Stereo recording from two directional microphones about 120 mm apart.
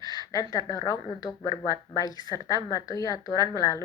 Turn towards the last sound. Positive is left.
turn(degrees=30)  # may be behind; listen again after turning